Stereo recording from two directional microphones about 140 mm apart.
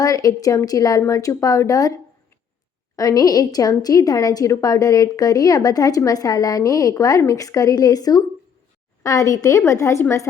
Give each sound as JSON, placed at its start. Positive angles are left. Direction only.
{"t": 0.0, "sound": "a woman's voice", "side_deg": 25}
{"t": 2.9, "sound": "a woman's voice", "side_deg": 25}